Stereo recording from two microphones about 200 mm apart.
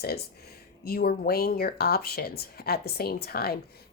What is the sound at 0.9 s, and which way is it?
Speech, 50° left (ahead or behind).